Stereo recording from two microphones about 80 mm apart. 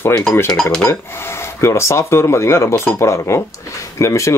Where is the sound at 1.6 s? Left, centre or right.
Left.